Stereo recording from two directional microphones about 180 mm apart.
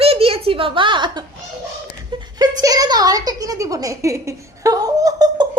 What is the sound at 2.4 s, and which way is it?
A woman's voice, 20° right (ahead or behind).